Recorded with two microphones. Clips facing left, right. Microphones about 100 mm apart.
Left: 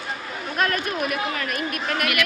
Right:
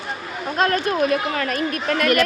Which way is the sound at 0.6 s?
30° right (ahead or behind).